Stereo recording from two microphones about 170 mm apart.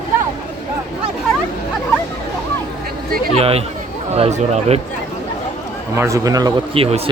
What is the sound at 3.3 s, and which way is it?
Speech, 35° right (ahead or behind).